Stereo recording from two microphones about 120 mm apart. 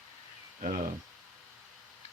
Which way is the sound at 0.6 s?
90° right.